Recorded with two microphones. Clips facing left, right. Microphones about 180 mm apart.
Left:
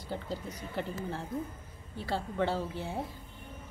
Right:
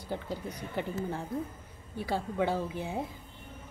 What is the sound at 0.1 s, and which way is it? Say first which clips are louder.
A woman's voice: right 1 dB; 10° right (ahead or behind).